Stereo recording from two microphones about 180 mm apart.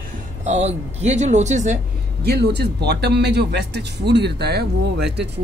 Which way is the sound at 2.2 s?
65° right (ahead or behind).